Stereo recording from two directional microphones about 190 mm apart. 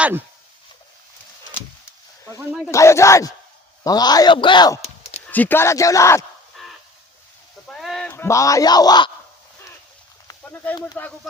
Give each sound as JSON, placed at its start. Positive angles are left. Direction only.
{"t": 2.4, "sound": "speech", "side_deg": -5}
{"t": 2.6, "sound": "speech", "side_deg": 15}
{"t": 5.3, "sound": "speech", "side_deg": 10}
{"t": 6.6, "sound": "a sound", "side_deg": 0}
{"t": 7.7, "sound": "fowl", "side_deg": 0}
{"t": 8.1, "sound": "speech", "side_deg": 15}
{"t": 10.2, "sound": "a sound", "side_deg": 10}
{"t": 11.0, "sound": "speech", "side_deg": 10}